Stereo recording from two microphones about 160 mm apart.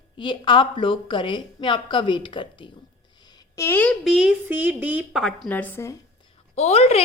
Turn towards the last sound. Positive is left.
turn(degrees=40)  # may be behind; listen again after turning